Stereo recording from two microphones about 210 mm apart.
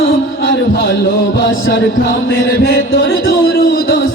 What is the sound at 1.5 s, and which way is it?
Music, 65° left (ahead or behind).